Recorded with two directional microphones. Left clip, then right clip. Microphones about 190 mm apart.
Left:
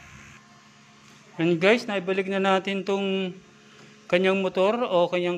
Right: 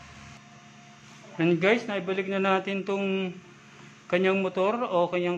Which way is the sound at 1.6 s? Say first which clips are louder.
Left 3 dB; 25° left (ahead or behind).